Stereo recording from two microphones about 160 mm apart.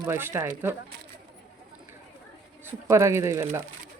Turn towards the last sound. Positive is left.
turn(degrees=-15)  # may be behind; listen again after turning